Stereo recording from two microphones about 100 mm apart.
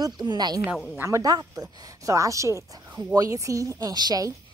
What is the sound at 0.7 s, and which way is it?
Speech, 5° left (ahead or behind).